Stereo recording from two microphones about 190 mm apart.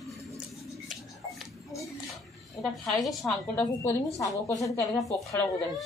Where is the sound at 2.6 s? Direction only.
Centre (ahead or behind).